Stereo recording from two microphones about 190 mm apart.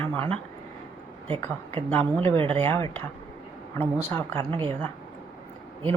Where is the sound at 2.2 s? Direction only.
30° right (ahead or behind).